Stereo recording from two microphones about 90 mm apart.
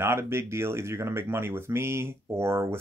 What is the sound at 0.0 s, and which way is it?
Speech, 30° right (ahead or behind).